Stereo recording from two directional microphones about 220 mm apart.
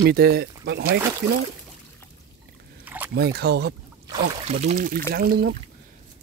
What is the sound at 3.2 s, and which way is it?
Speech, 45° right (ahead or behind).